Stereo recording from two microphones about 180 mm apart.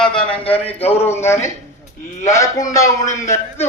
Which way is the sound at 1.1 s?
15° left (ahead or behind).